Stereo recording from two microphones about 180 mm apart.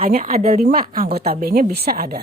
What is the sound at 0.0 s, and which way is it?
Speech, 35° right (ahead or behind).